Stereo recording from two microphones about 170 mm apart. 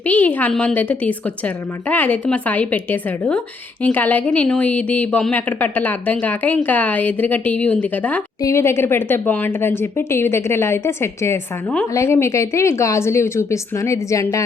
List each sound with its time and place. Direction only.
0.1 s a woman's voice: 10° left (ahead or behind)